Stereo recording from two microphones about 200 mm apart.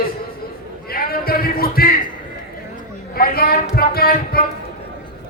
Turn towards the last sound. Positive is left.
turn(degrees=50)  # may be behind; listen again after turning